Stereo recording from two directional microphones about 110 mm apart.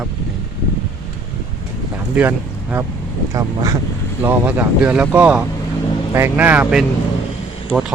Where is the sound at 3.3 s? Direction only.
35° right (ahead or behind).